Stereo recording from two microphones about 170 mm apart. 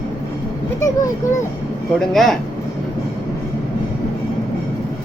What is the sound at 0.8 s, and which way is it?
Speech, 20° left (ahead or behind).